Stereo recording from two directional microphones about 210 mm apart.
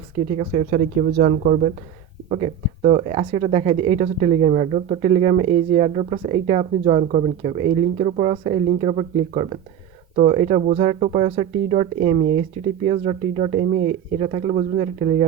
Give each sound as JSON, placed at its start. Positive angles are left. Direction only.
{"t": 0.3, "sound": "speech", "side_deg": -35}
{"t": 2.3, "sound": "speech", "side_deg": -30}